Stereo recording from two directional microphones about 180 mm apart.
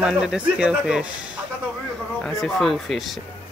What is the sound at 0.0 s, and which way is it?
Speech, 5° right (ahead or behind).